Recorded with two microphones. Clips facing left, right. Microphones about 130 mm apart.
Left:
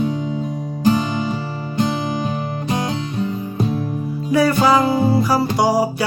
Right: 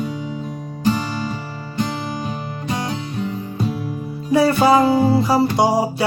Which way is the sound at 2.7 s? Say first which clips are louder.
Left 2 dB; 20° left (ahead or behind).